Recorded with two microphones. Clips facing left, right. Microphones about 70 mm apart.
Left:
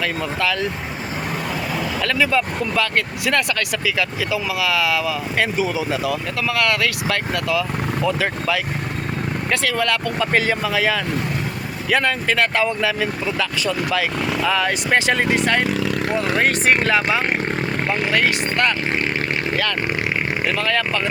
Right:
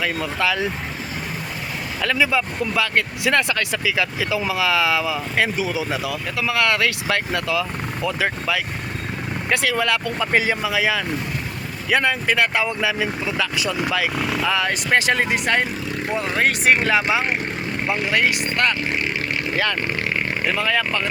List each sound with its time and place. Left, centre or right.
0.3 s speech: centre
2.0 s speech: centre
3.8 s speech: right
5.5 s speech: centre
6.5 s speech: right
8.0 s speech: centre
20.6 s speech: centre